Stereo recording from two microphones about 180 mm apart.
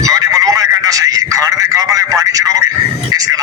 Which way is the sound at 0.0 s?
20° right (ahead or behind).